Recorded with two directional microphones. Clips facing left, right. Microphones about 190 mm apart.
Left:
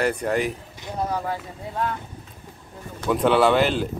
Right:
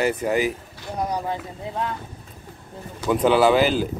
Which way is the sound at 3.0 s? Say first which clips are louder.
Right 1 dB; centre (ahead or behind).